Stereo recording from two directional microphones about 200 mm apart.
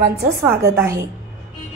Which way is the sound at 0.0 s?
45° right (ahead or behind).